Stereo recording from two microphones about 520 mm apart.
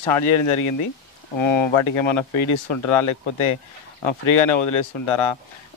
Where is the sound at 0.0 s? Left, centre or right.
Left.